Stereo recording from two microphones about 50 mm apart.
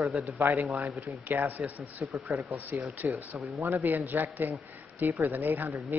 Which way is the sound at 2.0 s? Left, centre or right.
Right.